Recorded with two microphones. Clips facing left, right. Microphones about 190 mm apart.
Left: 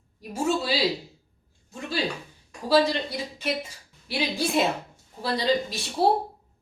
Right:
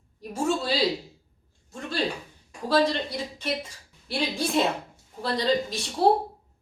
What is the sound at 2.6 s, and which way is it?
A woman's voice, 5° left (ahead or behind).